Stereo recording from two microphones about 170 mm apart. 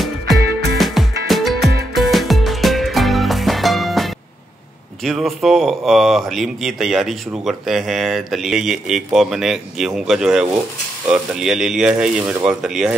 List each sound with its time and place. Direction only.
0.5 s music: 70° right (ahead or behind)
0.7 s music: centre (ahead or behind)
5.0 s speech: centre (ahead or behind)